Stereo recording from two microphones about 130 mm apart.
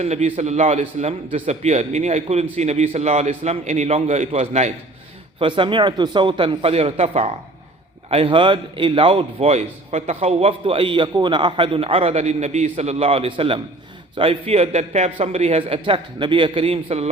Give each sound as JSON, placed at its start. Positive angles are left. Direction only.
{"t": 0.0, "sound": "a man's voice", "side_deg": -55}
{"t": 5.4, "sound": "a man's voice", "side_deg": -40}